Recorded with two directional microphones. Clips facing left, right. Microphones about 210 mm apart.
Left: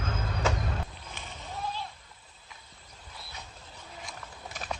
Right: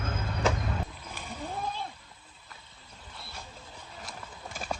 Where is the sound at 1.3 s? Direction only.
50° right (ahead or behind).